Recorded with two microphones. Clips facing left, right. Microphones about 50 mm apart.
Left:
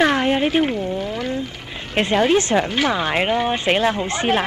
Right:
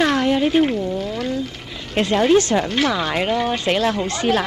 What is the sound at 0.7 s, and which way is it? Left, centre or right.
Speech, left.